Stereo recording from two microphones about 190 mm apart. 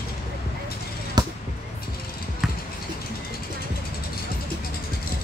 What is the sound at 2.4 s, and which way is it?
Patter, centre (ahead or behind).